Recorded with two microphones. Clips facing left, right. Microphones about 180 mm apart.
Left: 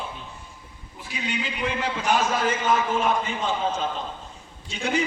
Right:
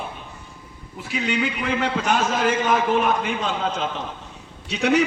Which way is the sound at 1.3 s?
65° right (ahead or behind).